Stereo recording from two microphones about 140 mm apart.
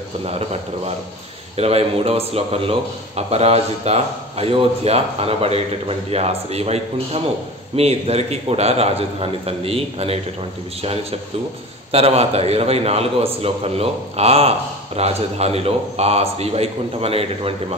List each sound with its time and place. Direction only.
0.2 s a man's voice: 45° right (ahead or behind)